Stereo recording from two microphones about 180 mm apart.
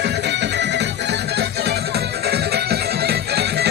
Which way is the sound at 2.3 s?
60° right (ahead or behind).